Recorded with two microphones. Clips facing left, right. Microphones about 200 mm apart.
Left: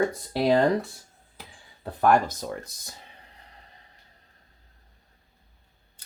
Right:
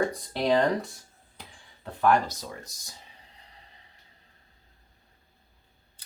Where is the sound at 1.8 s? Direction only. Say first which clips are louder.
Left 2 dB; 40° left (ahead or behind); by 2.9 s 55° left (ahead or behind).